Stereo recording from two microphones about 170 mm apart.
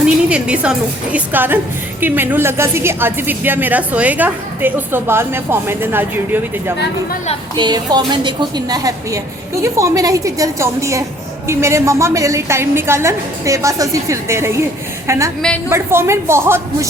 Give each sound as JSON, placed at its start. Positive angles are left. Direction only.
{"t": 0.0, "sound": "a woman's voice", "side_deg": -5}
{"t": 7.5, "sound": "a woman's voice", "side_deg": -25}
{"t": 15.4, "sound": "a woman's voice", "side_deg": 5}
{"t": 15.7, "sound": "a woman's voice", "side_deg": -15}